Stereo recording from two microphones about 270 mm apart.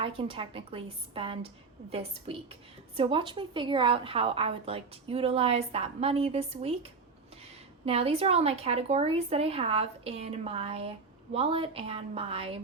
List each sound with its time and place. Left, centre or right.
0.0 s a woman's voice: centre
7.9 s a woman's voice: right